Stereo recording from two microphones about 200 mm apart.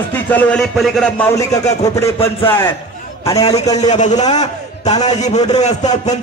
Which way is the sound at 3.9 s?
35° left (ahead or behind).